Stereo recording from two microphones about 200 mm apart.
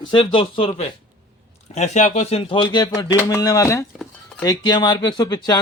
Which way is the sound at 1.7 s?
35° left (ahead or behind).